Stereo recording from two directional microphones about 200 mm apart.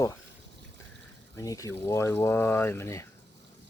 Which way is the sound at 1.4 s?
15° left (ahead or behind).